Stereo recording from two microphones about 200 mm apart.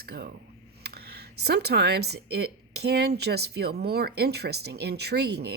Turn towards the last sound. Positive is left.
turn(degrees=-55)  # may be behind; listen again after turning